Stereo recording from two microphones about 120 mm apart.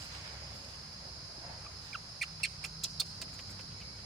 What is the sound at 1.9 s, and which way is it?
Chicken, centre (ahead or behind).